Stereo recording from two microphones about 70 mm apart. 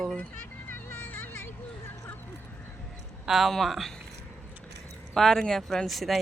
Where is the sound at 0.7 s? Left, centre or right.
Left.